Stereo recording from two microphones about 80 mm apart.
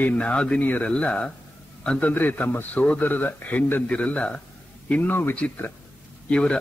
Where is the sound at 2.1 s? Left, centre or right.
Left.